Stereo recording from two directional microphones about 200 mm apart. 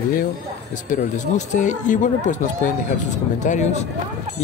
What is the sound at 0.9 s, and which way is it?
Speech, 40° left (ahead or behind).